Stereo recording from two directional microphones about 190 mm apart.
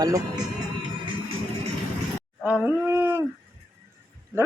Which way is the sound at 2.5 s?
10° right (ahead or behind).